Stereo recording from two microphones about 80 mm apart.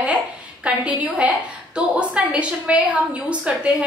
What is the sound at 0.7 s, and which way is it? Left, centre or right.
A woman's voice, centre.